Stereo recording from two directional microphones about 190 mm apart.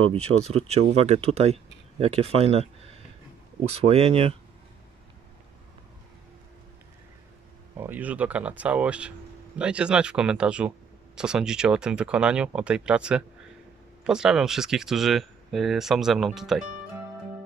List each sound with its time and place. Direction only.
0.0 s speech: 30° right (ahead or behind)
7.7 s speech: 10° right (ahead or behind)